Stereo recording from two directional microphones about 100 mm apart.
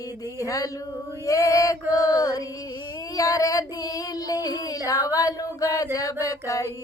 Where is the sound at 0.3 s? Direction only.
35° left (ahead or behind).